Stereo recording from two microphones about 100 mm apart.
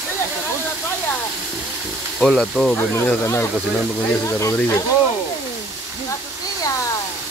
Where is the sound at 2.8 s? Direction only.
20° left (ahead or behind).